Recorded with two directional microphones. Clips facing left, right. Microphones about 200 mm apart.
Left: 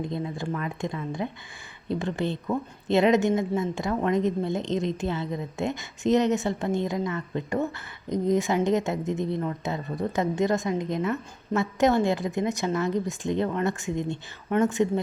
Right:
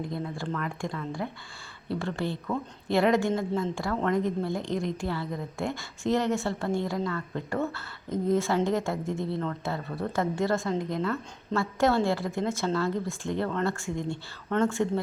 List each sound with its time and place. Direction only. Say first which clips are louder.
0.0 s speech: left 3 dB; 20° left (ahead or behind)